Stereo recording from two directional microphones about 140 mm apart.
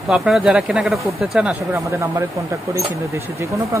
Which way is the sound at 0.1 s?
5° right (ahead or behind).